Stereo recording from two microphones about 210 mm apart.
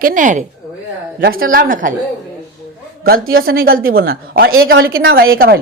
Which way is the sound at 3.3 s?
45° right (ahead or behind).